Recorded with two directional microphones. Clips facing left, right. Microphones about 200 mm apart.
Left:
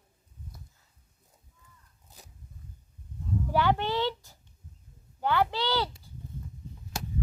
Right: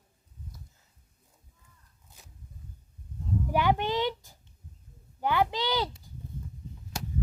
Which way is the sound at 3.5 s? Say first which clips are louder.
Even; 15° right (ahead or behind).